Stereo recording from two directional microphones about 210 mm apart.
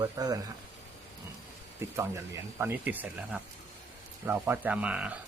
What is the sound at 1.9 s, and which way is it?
Speech, 10° right (ahead or behind).